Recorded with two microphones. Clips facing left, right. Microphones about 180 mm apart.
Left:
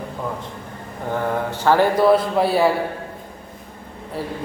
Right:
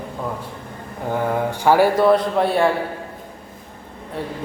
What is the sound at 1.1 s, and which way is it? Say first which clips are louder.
Speech: right 2 dB; 10° right (ahead or behind).